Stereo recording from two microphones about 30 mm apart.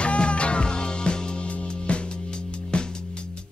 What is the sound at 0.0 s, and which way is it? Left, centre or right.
Music, left.